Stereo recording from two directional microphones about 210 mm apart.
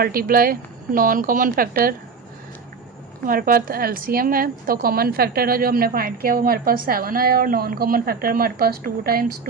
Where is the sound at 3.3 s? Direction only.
45° right (ahead or behind).